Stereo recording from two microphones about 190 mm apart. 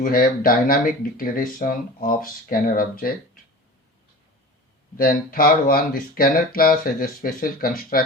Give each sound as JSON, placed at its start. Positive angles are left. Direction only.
{"t": 0.0, "sound": "speech", "side_deg": 50}
{"t": 4.9, "sound": "speech", "side_deg": 50}